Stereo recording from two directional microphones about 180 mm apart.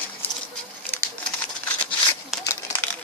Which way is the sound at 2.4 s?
15° left (ahead or behind).